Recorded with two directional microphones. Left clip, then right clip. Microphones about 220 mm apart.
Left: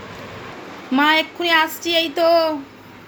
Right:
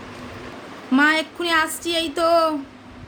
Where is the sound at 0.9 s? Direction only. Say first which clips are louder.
Left 2 dB; 15° right (ahead or behind).